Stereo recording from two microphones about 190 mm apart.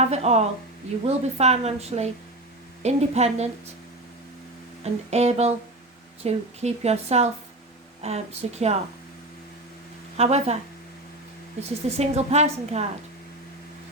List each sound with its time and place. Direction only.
0.0 s a woman's voice: 35° right (ahead or behind)
4.8 s a woman's voice: 35° right (ahead or behind)
10.2 s a woman's voice: 35° right (ahead or behind)
11.9 s a woman's voice: 35° right (ahead or behind)